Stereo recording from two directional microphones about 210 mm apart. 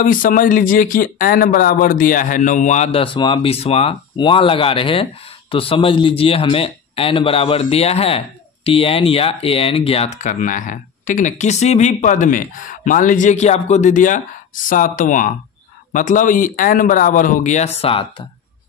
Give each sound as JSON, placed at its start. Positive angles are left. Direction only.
{"t": 0.0, "sound": "speech", "side_deg": 40}